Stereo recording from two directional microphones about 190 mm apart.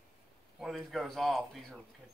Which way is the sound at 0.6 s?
Centre (ahead or behind).